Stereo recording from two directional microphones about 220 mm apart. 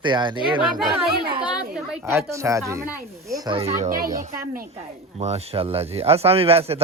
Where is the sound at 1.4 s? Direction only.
5° right (ahead or behind).